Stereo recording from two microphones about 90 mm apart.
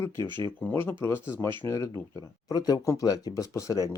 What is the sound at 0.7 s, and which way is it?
Speech, 25° left (ahead or behind).